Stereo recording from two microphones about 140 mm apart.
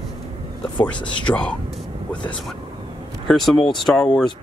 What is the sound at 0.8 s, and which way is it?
Speech, 10° left (ahead or behind).